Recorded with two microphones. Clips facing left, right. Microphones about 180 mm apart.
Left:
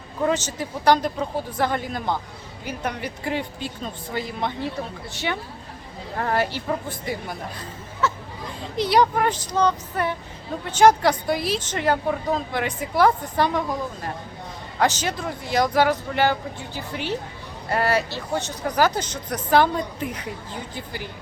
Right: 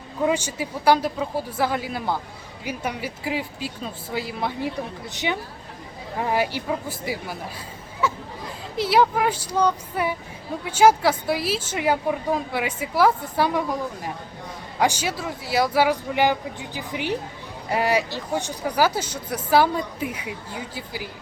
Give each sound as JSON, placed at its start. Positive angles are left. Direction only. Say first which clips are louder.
{"t": 0.2, "sound": "speech", "louder": "even", "side_deg": -10}
{"t": 5.1, "sound": "speech", "louder": "right 1 dB", "side_deg": -15}
{"t": 8.0, "sound": "hubbub", "louder": "even", "side_deg": -10}
{"t": 8.7, "sound": "speech", "louder": "even", "side_deg": -5}